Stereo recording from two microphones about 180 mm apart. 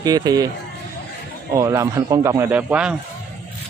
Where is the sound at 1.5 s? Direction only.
15° right (ahead or behind).